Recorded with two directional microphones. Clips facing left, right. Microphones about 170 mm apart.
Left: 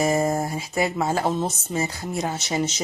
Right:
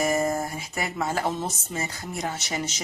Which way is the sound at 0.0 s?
25° left (ahead or behind).